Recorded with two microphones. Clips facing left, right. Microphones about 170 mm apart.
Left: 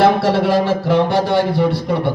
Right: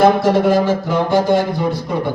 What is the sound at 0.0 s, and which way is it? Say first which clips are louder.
Speech: right 1 dB; 70° left (ahead or behind).